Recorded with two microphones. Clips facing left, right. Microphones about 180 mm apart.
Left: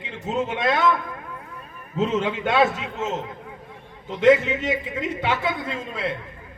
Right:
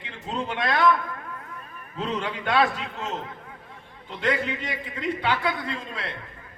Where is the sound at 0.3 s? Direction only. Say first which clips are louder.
Left 3 dB; 20° left (ahead or behind).